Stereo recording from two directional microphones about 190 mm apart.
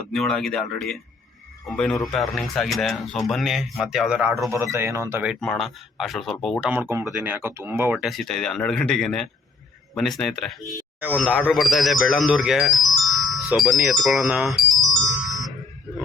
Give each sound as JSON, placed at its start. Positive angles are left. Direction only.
{"t": 0.1, "sound": "a man's voice", "side_deg": 0}
{"t": 5.3, "sound": "a man's voice", "side_deg": 0}
{"t": 7.9, "sound": "a man's voice", "side_deg": 0}
{"t": 10.7, "sound": "a sound", "side_deg": -15}
{"t": 11.1, "sound": "a man's voice", "side_deg": 0}
{"t": 14.8, "sound": "music", "side_deg": -20}